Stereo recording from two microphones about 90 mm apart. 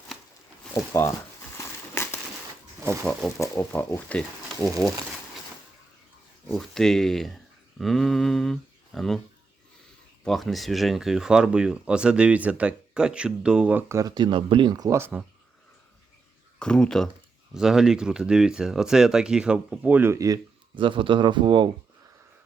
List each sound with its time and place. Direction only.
0.7 s speech: 30° left (ahead or behind)
1.5 s crumpling: 25° left (ahead or behind)
2.8 s speech: 30° right (ahead or behind)
3.1 s speech: 5° left (ahead or behind)
3.3 s speech: 35° left (ahead or behind)
6.6 s speech: 5° left (ahead or behind)
10.2 s speech: 5° left (ahead or behind)
13.7 s speech: 30° right (ahead or behind)
14.0 s speech: 55° right (ahead or behind)
14.8 s speech: 35° right (ahead or behind)
16.6 s speech: 10° left (ahead or behind)
17.5 s speech: 5° right (ahead or behind); by 20.1 s 20° right (ahead or behind)
20.1 s speech: 40° right (ahead or behind)
20.7 s speech: 70° right (ahead or behind)